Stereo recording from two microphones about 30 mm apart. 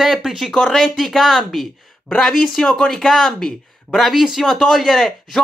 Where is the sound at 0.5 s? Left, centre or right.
Centre.